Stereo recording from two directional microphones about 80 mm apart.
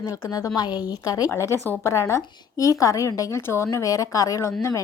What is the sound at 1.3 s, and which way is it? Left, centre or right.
A woman's voice, left.